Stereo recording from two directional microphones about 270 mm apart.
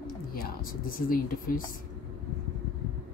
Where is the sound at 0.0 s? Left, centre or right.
Left.